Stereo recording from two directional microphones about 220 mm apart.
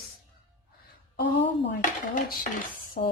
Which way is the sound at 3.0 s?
35° left (ahead or behind).